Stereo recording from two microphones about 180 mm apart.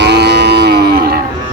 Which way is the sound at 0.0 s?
70° right (ahead or behind).